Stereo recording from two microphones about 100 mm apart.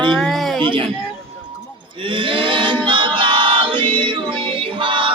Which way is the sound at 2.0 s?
55° right (ahead or behind).